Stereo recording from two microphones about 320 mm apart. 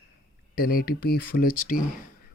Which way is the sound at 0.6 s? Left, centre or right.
Left.